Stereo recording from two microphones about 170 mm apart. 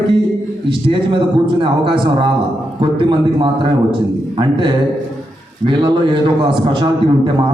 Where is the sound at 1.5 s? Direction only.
30° right (ahead or behind).